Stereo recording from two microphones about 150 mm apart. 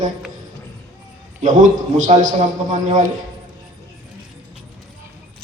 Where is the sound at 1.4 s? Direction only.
55° right (ahead or behind).